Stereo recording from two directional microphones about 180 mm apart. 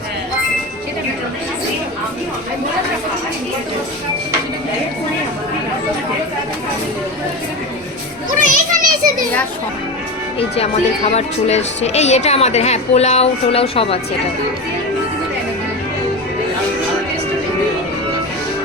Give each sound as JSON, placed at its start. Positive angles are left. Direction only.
{"t": 8.4, "sound": "children playing", "side_deg": -45}
{"t": 11.1, "sound": "speech", "side_deg": 35}